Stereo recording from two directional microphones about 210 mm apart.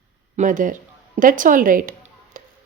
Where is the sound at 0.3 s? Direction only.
40° right (ahead or behind).